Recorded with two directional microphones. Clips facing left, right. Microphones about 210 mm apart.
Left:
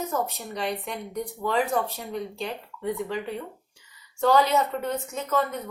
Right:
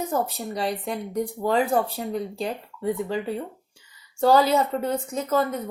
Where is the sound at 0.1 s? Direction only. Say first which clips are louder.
Right 3 dB; 35° right (ahead or behind).